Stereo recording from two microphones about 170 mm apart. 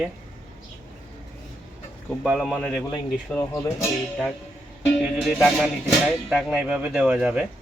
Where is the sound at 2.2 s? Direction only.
5° right (ahead or behind).